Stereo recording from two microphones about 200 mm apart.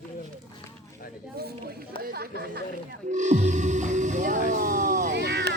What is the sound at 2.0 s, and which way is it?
Chatter, 50° right (ahead or behind).